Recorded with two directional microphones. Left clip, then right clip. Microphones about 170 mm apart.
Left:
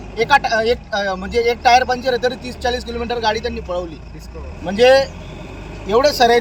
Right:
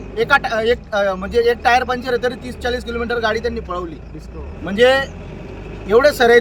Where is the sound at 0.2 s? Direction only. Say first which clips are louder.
Left 1 dB; 40° right (ahead or behind).